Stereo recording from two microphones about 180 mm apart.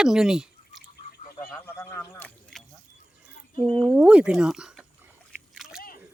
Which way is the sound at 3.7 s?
5° right (ahead or behind).